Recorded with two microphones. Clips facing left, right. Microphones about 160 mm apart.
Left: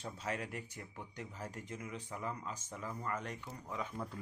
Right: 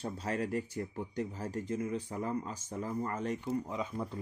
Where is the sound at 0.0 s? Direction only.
35° right (ahead or behind); by 4.2 s 15° right (ahead or behind).